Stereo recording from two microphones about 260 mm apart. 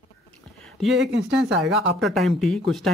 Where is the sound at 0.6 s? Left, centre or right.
Centre.